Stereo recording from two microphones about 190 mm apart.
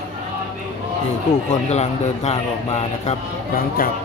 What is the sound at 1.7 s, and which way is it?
A man's voice, 35° left (ahead or behind).